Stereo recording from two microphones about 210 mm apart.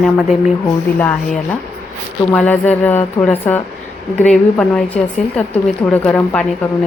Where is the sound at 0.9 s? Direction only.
5° left (ahead or behind).